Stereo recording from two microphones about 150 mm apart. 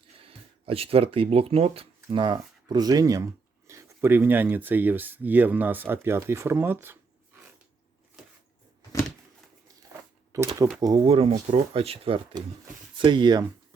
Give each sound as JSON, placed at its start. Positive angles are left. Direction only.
{"t": 0.2, "sound": "speech", "side_deg": -40}
{"t": 10.3, "sound": "speech", "side_deg": -20}
{"t": 11.0, "sound": "speech", "side_deg": -40}